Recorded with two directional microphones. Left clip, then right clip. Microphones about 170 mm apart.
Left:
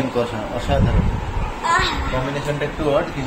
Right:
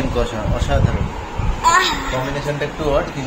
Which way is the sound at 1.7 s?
60° right (ahead or behind).